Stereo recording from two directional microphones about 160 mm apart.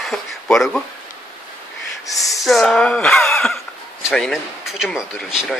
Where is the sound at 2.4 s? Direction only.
Centre (ahead or behind).